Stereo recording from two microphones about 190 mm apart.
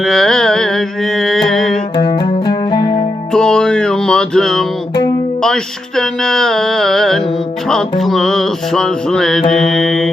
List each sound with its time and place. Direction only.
0.0 s carnatic music: centre (ahead or behind)
1.2 s mantra: centre (ahead or behind)
2.0 s music: 25° left (ahead or behind)
3.3 s music: 5° left (ahead or behind)
6.0 s music: 5° left (ahead or behind)